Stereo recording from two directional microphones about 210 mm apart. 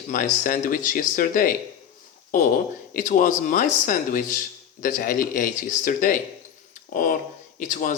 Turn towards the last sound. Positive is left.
turn(degrees=40)  # may be behind; listen again after turning